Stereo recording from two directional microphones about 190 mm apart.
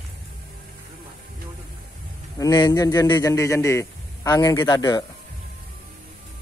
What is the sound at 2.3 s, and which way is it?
A man's voice, 20° left (ahead or behind).